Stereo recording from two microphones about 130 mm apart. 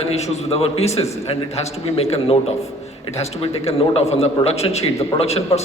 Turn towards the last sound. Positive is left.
turn(degrees=55)  # may be behind; listen again after turning